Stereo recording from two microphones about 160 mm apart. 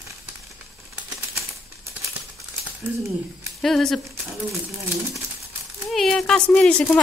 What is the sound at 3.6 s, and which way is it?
Speech, centre (ahead or behind).